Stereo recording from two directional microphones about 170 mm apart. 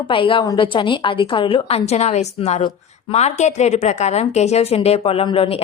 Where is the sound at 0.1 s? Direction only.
30° left (ahead or behind).